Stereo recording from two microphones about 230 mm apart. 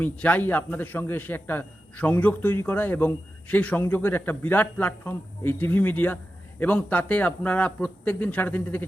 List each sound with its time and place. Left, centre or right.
0.0 s a man's voice: centre